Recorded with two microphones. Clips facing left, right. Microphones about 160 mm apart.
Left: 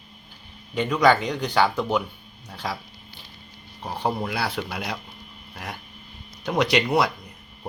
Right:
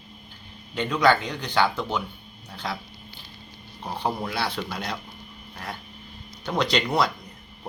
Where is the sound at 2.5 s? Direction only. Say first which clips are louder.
Left 1 dB; 10° left (ahead or behind).